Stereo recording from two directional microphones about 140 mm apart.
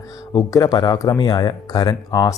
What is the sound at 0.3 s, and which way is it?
Speech, 25° left (ahead or behind).